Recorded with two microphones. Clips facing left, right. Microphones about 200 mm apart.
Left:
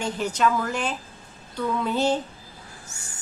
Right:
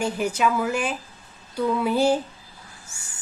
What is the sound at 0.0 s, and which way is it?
A woman's voice, 10° right (ahead or behind).